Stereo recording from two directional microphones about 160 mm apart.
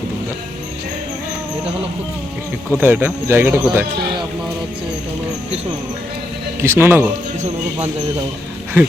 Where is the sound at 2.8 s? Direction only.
10° right (ahead or behind).